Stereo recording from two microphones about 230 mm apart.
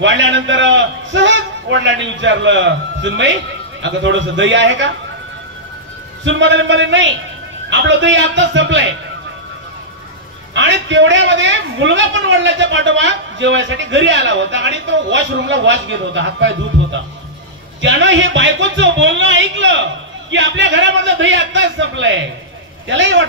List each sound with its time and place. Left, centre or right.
0.0 s a man's voice: right
6.2 s a man's voice: right
10.5 s a man's voice: right